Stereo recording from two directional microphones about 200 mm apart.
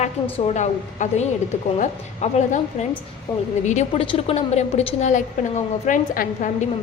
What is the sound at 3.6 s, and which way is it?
A woman's voice, 35° left (ahead or behind).